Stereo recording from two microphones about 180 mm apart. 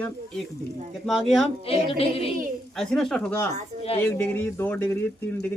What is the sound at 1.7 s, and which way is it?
A capella, 35° left (ahead or behind).